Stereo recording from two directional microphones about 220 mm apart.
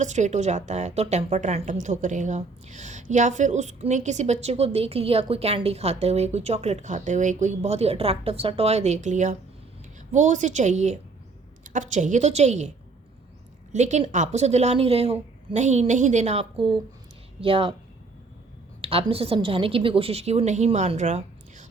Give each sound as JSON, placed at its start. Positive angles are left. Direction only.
{"t": 0.0, "sound": "a woman's voice", "side_deg": -30}
{"t": 13.7, "sound": "a woman's voice", "side_deg": -30}
{"t": 18.8, "sound": "a woman's voice", "side_deg": -25}